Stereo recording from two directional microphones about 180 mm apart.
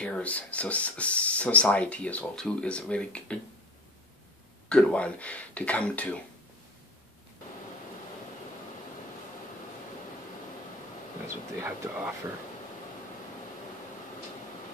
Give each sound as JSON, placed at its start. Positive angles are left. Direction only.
{"t": 0.0, "sound": "speech", "side_deg": 5}
{"t": 4.6, "sound": "speech", "side_deg": 5}
{"t": 11.2, "sound": "speech", "side_deg": -15}